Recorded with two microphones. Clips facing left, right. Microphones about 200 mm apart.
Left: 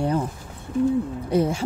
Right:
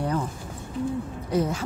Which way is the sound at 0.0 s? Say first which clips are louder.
Left 4 dB; 30° left (ahead or behind).